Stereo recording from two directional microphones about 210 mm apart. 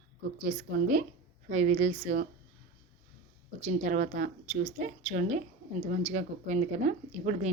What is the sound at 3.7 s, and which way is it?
Speech, 35° right (ahead or behind).